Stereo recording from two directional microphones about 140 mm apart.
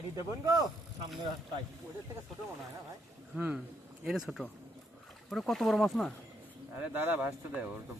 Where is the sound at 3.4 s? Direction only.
10° right (ahead or behind).